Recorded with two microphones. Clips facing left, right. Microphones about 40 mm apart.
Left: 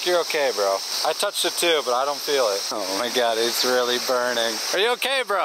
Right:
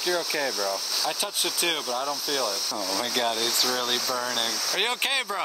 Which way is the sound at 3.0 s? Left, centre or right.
Centre.